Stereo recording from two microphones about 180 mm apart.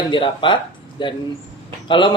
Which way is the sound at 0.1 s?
25° left (ahead or behind).